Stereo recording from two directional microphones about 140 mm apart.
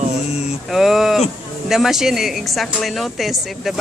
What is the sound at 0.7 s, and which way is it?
Speech, centre (ahead or behind).